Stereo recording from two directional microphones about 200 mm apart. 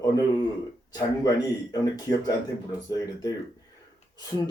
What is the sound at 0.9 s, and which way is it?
A man's voice, 20° left (ahead or behind).